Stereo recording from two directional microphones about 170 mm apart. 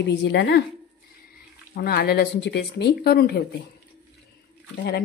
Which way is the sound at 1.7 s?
65° left (ahead or behind).